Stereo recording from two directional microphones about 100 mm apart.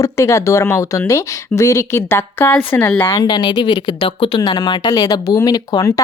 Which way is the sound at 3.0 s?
30° left (ahead or behind).